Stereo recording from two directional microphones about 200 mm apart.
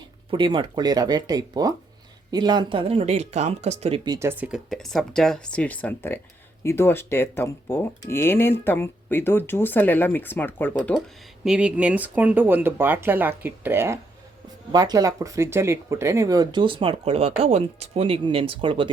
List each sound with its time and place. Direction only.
0.3 s speech: 25° right (ahead or behind); by 11.0 s 5° left (ahead or behind)
11.4 s speech: 5° right (ahead or behind); by 18.9 s 25° right (ahead or behind)